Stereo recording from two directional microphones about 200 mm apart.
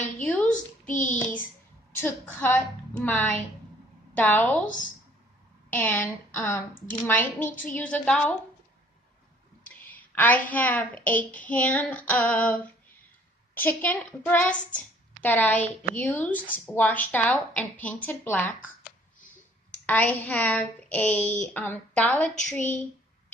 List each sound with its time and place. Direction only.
0.2 s a sound: 5° left (ahead or behind)
0.5 s child singing: 40° left (ahead or behind)
2.0 s a woman's voice: 10° left (ahead or behind)
4.6 s speech: 40° left (ahead or behind)
5.7 s a woman's voice: 10° left (ahead or behind)
9.9 s a woman's voice: 10° left (ahead or behind)
19.8 s a woman's voice: 5° left (ahead or behind)